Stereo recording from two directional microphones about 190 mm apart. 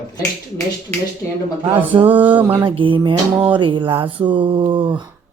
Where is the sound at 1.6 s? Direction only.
25° right (ahead or behind).